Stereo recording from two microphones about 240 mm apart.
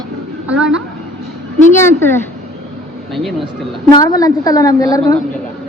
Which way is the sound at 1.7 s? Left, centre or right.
Centre.